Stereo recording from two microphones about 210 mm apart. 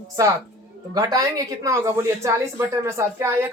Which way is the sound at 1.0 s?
20° right (ahead or behind).